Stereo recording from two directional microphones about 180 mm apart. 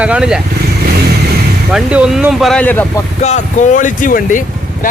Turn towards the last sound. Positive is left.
turn(degrees=45)  # may be behind; listen again after turning